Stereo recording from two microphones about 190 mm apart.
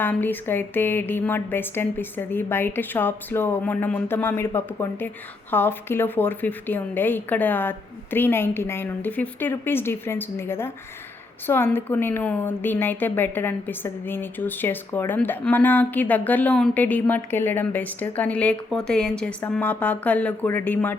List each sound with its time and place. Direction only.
0.0 s a woman's voice: 10° left (ahead or behind)